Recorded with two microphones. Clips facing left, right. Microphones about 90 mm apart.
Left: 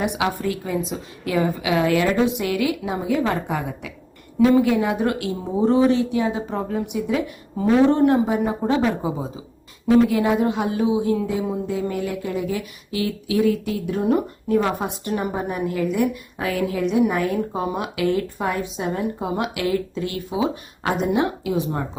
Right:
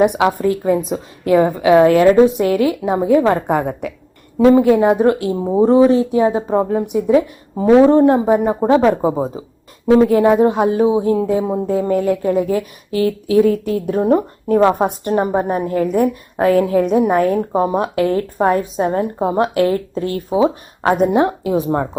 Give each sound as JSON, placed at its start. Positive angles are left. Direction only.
{"t": 0.0, "sound": "a woman's voice", "side_deg": -50}
{"t": 4.4, "sound": "speech", "side_deg": -35}